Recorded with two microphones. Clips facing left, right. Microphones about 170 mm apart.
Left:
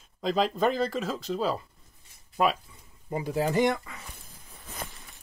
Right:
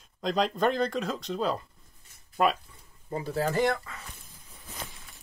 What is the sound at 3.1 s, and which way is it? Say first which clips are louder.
Speech: left 2 dB; 15° left (ahead or behind).